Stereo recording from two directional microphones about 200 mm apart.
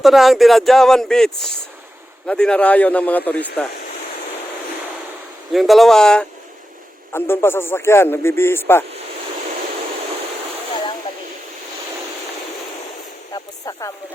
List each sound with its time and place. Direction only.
0.0 s speech: centre (ahead or behind)
5.5 s speech: centre (ahead or behind)
13.3 s a sound: 20° left (ahead or behind)